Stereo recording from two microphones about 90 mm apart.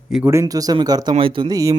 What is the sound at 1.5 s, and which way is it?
Speech, 35° right (ahead or behind).